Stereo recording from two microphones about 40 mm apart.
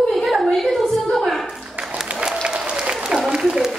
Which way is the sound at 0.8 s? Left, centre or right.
Centre.